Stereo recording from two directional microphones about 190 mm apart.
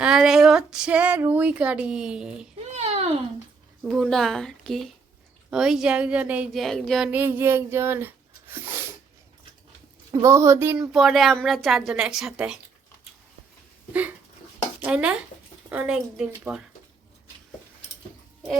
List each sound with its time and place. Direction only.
0.0 s speech: 5° right (ahead or behind)
2.7 s a sound: 35° right (ahead or behind)
3.8 s a woman's voice: centre (ahead or behind)
10.1 s speech: 20° right (ahead or behind)
10.9 s a woman's voice: centre (ahead or behind)
14.8 s a woman's voice: 5° right (ahead or behind)